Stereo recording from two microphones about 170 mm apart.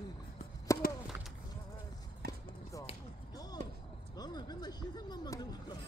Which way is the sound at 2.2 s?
65° right (ahead or behind).